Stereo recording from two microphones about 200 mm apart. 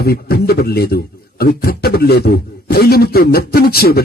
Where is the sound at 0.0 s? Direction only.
50° left (ahead or behind).